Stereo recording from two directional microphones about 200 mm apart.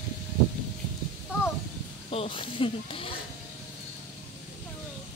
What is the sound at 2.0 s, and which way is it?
Speech, 25° left (ahead or behind).